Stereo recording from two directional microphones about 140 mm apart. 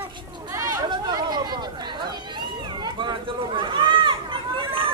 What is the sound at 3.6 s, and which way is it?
Run, 35° right (ahead or behind).